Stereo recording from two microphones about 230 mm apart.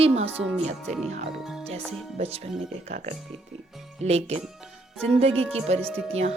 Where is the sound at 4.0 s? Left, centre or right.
Right.